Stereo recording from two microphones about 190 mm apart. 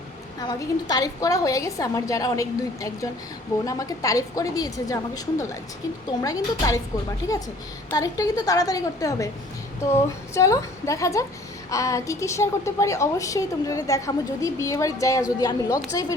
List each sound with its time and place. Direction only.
0.3 s a woman's voice: 20° left (ahead or behind)